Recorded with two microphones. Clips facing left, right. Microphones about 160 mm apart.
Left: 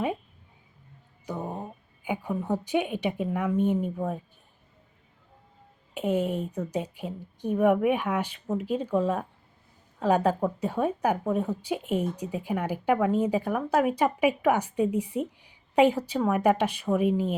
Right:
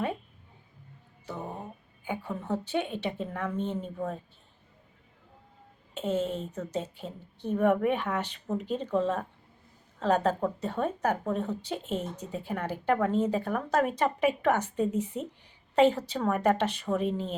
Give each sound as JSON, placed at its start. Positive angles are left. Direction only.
{"t": 1.3, "sound": "a sound", "side_deg": 15}
{"t": 2.0, "sound": "speech", "side_deg": 10}
{"t": 5.9, "sound": "speech", "side_deg": 15}